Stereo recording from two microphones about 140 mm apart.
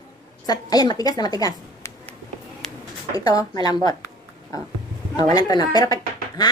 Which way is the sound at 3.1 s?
25° left (ahead or behind).